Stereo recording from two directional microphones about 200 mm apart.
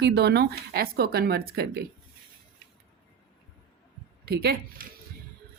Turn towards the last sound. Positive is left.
turn(degrees=-50)  # may be behind; listen again after turning